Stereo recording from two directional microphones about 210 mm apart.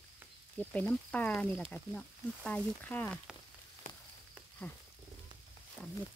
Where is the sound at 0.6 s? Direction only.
5° left (ahead or behind).